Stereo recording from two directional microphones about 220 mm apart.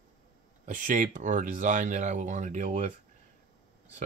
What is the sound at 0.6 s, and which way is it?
Speech, 35° right (ahead or behind).